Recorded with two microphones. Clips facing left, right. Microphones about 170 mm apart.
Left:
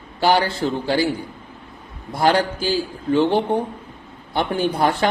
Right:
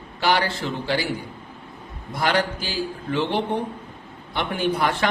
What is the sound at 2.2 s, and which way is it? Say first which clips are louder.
A woman's voice: left 5 dB; 35° left (ahead or behind).